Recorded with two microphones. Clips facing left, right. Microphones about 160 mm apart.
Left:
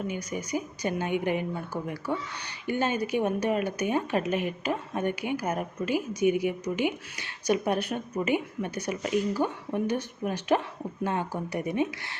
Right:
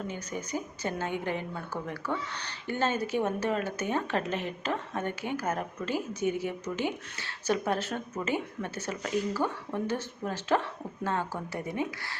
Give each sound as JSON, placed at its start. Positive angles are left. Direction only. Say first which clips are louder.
{"t": 0.1, "sound": "speech", "louder": "left 3 dB", "side_deg": 10}